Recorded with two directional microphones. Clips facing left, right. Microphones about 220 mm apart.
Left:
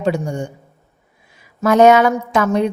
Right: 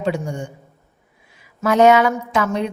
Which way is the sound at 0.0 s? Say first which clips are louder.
Left 3 dB; 40° left (ahead or behind).